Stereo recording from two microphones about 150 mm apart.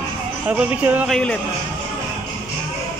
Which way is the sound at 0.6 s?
10° right (ahead or behind).